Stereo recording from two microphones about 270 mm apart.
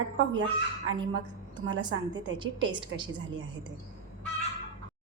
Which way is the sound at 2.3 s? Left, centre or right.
Centre.